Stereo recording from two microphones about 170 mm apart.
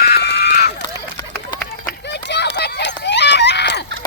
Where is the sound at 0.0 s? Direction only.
75° left (ahead or behind).